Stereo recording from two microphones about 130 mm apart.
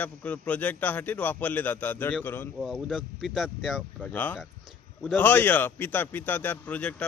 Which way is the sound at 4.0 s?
15° left (ahead or behind).